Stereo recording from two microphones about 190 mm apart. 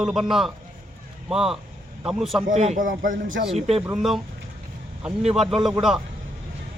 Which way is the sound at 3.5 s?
35° right (ahead or behind).